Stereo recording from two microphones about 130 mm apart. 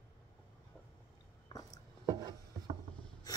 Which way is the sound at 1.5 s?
30° left (ahead or behind).